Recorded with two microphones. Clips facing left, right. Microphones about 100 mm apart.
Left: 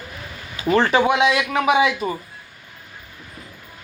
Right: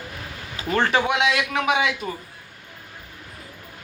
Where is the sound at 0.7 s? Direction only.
5° left (ahead or behind).